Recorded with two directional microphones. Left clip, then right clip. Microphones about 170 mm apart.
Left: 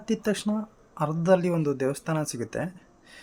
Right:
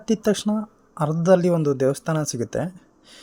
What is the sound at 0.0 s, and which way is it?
Speech, 25° right (ahead or behind).